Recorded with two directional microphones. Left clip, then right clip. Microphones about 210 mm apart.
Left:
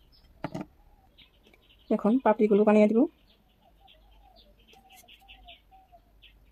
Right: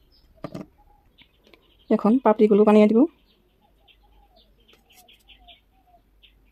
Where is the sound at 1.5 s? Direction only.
30° right (ahead or behind).